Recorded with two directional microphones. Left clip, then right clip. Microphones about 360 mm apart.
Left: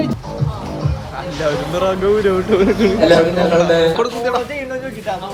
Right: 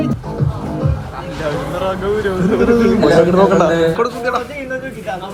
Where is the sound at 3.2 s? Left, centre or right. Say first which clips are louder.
Right 2 dB; centre.